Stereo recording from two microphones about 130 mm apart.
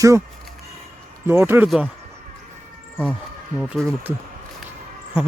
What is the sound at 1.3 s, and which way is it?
Speech, 15° right (ahead or behind).